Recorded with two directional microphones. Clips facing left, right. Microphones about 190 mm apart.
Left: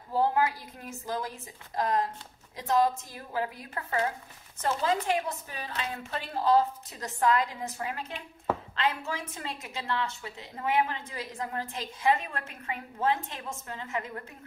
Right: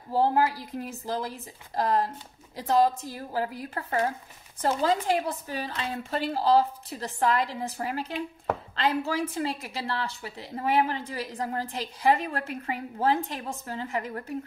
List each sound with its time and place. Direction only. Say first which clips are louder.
0.1 s a woman's voice: right 3 dB; 35° right (ahead or behind)